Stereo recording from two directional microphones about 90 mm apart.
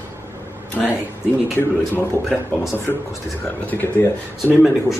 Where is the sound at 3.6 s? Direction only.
20° left (ahead or behind).